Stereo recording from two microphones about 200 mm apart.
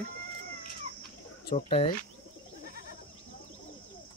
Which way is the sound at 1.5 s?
30° left (ahead or behind).